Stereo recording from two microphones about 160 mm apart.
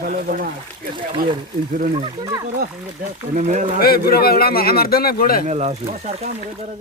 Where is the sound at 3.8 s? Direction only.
70° left (ahead or behind).